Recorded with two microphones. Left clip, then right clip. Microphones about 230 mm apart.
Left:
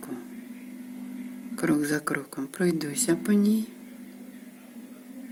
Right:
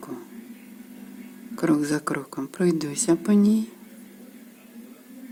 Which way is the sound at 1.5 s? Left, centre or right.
Centre.